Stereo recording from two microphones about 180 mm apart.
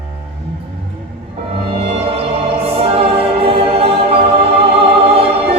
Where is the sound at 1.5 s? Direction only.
30° right (ahead or behind).